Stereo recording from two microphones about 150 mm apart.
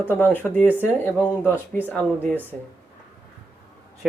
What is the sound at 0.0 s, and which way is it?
Speech, 15° left (ahead or behind).